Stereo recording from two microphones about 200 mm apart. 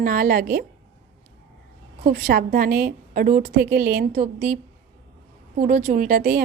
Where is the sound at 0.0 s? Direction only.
45° right (ahead or behind).